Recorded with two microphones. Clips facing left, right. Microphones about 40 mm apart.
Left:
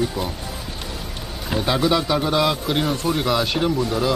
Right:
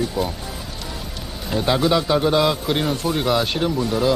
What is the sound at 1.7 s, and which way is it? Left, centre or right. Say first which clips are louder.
Speech: right 2 dB; centre.